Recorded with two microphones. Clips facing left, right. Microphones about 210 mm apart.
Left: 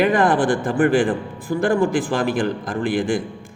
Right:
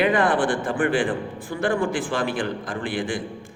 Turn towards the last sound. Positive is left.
turn(degrees=45)  # may be behind; listen again after turning